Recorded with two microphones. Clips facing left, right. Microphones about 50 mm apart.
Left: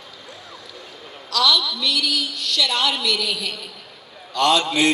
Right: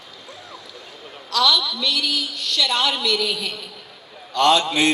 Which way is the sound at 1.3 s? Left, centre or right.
Right.